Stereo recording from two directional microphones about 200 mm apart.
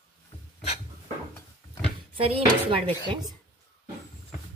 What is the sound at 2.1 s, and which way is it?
Speech, 25° right (ahead or behind).